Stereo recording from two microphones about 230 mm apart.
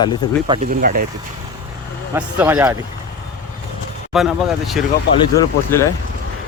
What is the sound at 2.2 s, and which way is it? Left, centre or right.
Speech, centre.